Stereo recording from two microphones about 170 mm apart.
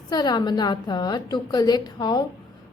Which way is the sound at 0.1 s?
25° left (ahead or behind).